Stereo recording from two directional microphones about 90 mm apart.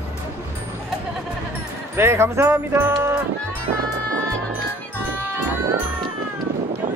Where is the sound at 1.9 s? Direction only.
30° right (ahead or behind).